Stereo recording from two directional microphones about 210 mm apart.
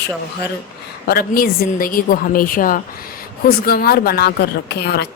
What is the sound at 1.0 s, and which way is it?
A woman's voice, 45° left (ahead or behind).